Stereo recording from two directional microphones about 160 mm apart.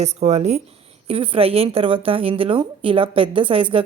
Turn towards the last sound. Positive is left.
turn(degrees=-35)  # may be behind; listen again after turning